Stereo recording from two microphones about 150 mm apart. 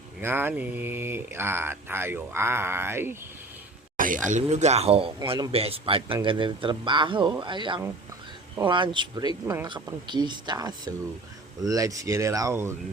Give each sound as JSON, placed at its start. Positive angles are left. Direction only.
{"t": 0.2, "sound": "speech", "side_deg": -15}
{"t": 3.9, "sound": "speech", "side_deg": -65}